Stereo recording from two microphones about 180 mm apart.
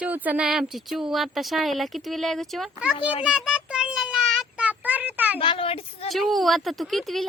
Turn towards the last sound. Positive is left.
turn(degrees=0)  # may be behind; listen again after turning